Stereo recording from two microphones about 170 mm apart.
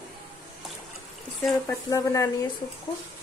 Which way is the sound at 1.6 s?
20° left (ahead or behind).